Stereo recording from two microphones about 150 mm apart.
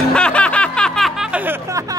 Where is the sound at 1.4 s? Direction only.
20° right (ahead or behind).